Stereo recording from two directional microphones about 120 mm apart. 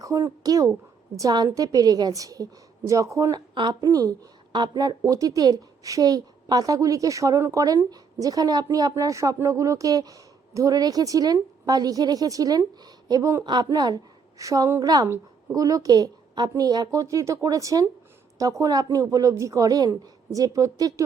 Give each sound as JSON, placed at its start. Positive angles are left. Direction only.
{"t": 0.0, "sound": "a woman's voice", "side_deg": -30}